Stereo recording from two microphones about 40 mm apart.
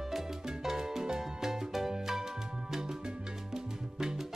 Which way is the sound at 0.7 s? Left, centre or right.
Centre.